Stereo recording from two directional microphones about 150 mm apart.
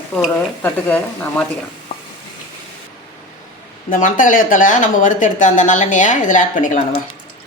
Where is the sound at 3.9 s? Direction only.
60° left (ahead or behind).